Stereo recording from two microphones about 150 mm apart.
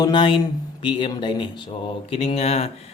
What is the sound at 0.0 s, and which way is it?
Speech, 30° left (ahead or behind).